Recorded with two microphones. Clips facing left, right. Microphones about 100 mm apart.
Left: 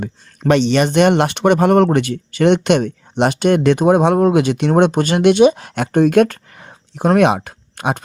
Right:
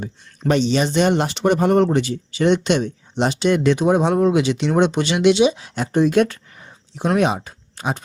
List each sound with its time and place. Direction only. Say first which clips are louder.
0.0 s speech: left 4 dB; 70° left (ahead or behind); by 6.4 s 50° left (ahead or behind)
6.5 s a sound: left 4 dB; 75° left (ahead or behind)
6.9 s speech: left 5 dB; 50° left (ahead or behind)
7.3 s speech: left 6 dB; 65° left (ahead or behind)